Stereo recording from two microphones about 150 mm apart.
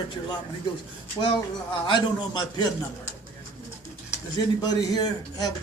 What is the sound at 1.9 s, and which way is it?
Speech, 30° left (ahead or behind).